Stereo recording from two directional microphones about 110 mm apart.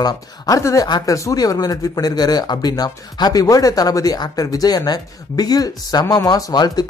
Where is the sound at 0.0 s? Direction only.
30° left (ahead or behind).